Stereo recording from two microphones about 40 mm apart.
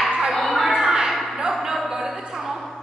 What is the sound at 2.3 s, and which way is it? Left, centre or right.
Music, centre.